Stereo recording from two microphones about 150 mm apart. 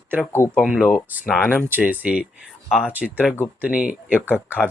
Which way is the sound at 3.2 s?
10° left (ahead or behind).